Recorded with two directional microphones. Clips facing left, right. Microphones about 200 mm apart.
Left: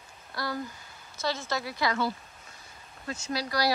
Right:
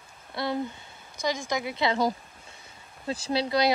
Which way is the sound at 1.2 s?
15° right (ahead or behind).